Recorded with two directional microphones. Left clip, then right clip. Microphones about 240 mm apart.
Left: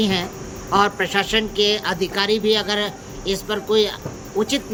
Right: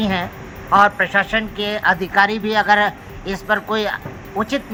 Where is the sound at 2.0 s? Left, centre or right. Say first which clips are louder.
Right 4 dB; left.